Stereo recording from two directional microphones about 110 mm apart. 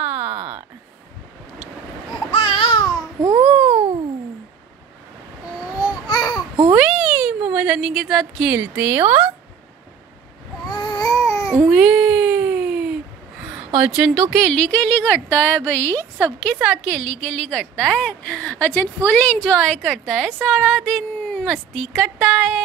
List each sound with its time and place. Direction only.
0.0 s a sound: 15° right (ahead or behind)
2.3 s babbling: 50° left (ahead or behind)
3.2 s babbling: 40° right (ahead or behind)
3.6 s a sound: 60° right (ahead or behind)
5.8 s babbling: 35° left (ahead or behind)
6.7 s cat: 5° right (ahead or behind)
8.5 s speech: 20° right (ahead or behind)
10.7 s baby cry: 40° left (ahead or behind)
11.1 s babbling: 30° left (ahead or behind)
11.5 s a sound: 5° right (ahead or behind)
13.7 s speech: 10° right (ahead or behind)
14.3 s a woman's voice: 5° left (ahead or behind)
16.7 s a woman's voice: 5° left (ahead or behind)